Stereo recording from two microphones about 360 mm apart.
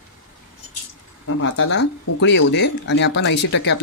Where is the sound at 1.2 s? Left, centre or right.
Left.